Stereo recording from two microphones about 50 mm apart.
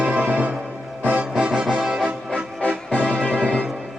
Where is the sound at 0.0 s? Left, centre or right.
Right.